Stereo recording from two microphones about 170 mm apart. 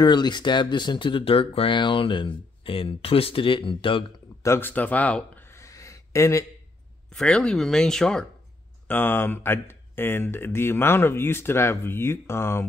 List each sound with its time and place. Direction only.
0.0 s speech: 25° left (ahead or behind)
4.4 s a sound: 15° left (ahead or behind)
7.1 s speech: 5° left (ahead or behind)